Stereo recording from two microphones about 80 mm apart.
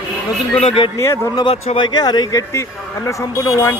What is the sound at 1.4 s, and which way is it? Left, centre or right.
Speech, left.